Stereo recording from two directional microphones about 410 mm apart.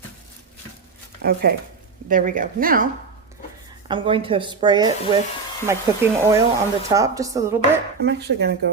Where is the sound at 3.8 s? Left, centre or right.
Centre.